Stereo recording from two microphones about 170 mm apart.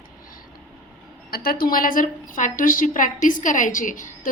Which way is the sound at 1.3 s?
60° left (ahead or behind).